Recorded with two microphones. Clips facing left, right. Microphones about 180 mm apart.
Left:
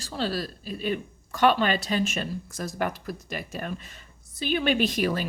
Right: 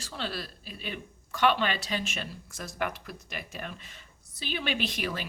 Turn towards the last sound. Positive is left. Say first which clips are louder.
# left 8 dB
turn(degrees=40)  # may be behind; listen again after turning